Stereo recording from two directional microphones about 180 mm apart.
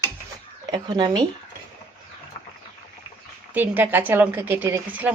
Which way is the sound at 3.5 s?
10° right (ahead or behind).